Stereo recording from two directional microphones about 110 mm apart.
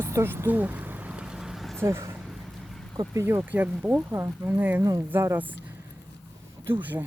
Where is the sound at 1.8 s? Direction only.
25° right (ahead or behind).